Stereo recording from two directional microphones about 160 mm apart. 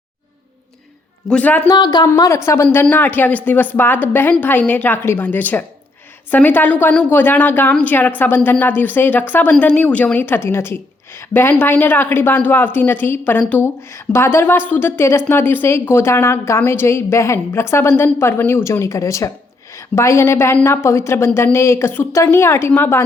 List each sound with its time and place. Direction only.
1.3 s speech: 10° left (ahead or behind)
1.6 s a woman's voice: 25° left (ahead or behind)